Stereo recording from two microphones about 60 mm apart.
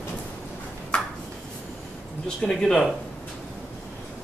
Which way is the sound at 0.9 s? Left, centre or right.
Centre.